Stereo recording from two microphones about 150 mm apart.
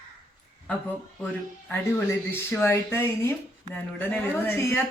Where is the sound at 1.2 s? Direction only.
15° left (ahead or behind).